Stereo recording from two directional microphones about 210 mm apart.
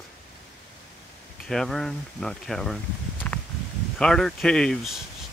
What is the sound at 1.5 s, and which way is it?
Speech, centre (ahead or behind).